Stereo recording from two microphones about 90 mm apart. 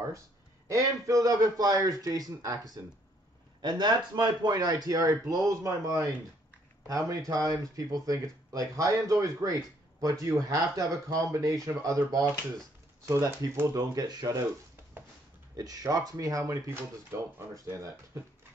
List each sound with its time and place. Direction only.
0.7 s a man's voice: 35° right (ahead or behind)
15.5 s speech: 40° right (ahead or behind)